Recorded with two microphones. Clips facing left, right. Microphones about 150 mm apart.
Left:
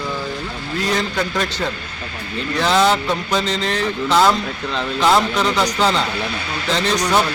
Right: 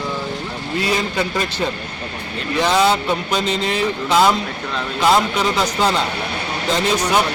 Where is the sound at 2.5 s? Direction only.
15° right (ahead or behind).